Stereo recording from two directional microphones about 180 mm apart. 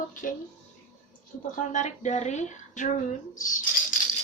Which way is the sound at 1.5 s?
45° left (ahead or behind).